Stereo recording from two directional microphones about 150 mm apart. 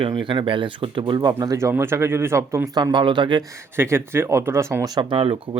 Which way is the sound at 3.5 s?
20° right (ahead or behind).